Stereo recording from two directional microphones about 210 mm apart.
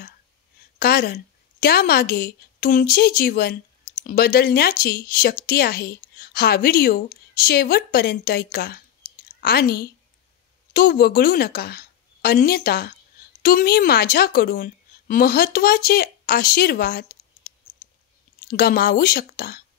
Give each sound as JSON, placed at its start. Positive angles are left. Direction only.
{"t": 0.7, "sound": "a woman's voice", "side_deg": 45}
{"t": 18.5, "sound": "speech", "side_deg": 45}